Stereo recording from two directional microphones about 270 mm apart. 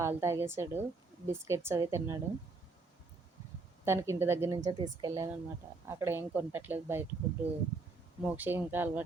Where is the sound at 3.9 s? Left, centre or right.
Centre.